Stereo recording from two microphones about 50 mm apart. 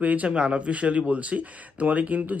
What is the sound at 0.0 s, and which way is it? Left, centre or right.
Speech, right.